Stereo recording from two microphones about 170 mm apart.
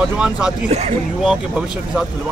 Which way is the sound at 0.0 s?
5° right (ahead or behind).